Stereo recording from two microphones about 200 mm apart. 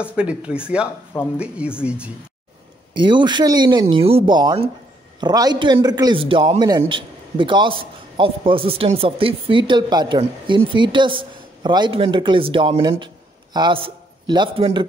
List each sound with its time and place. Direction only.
0.0 s speech: 5° right (ahead or behind)
3.0 s a man's voice: 25° right (ahead or behind)